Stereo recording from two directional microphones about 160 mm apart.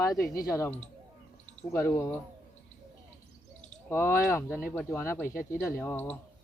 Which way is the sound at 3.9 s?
15° left (ahead or behind).